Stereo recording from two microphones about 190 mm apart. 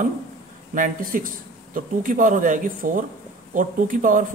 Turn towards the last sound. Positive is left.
turn(degrees=-45)  # may be behind; listen again after turning